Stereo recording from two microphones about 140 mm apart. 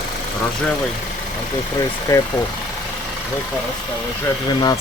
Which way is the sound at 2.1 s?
25° left (ahead or behind).